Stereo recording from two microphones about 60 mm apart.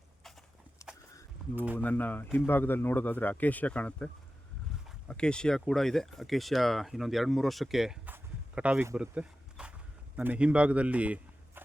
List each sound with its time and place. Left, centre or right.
0.8 s a sound: left
1.5 s a man's voice: right
1.8 s a man's voice: left; by 7.9 s centre
8.5 s speech: centre
9.0 s a sound: centre
10.3 s a man's voice: centre